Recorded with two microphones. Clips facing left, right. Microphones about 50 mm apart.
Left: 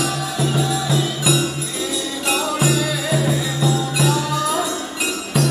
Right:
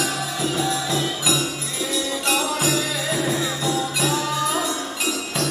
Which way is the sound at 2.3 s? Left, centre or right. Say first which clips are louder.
Left 4 dB; centre.